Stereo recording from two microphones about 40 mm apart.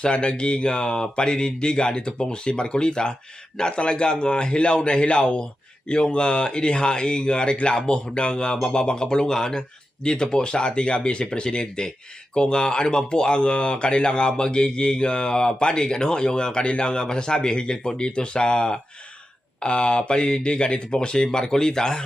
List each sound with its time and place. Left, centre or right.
0.0 s speech: left